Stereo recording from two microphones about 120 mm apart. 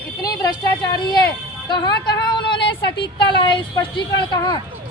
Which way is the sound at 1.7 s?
40° left (ahead or behind).